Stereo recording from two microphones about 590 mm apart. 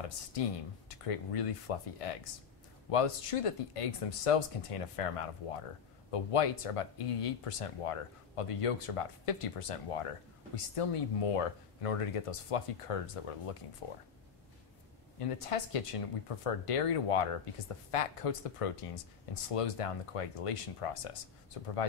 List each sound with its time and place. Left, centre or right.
0.3 s speech: left
15.1 s speech: left